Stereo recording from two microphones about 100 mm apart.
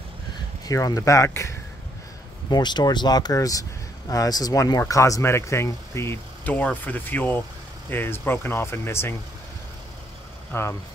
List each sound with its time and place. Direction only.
0.7 s speech: 35° left (ahead or behind)
2.5 s speech: 45° left (ahead or behind); by 6.1 s 25° left (ahead or behind)
6.4 s speech: 15° left (ahead or behind)
10.5 s speech: 25° left (ahead or behind)